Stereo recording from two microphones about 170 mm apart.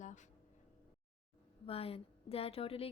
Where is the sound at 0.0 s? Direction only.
45° left (ahead or behind).